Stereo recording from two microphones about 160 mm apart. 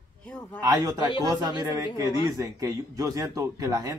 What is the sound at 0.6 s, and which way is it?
Speech, 20° right (ahead or behind).